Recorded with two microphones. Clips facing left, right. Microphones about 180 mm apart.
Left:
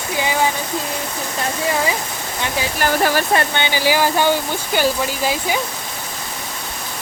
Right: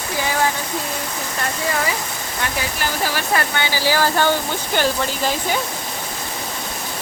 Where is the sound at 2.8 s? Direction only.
50° left (ahead or behind).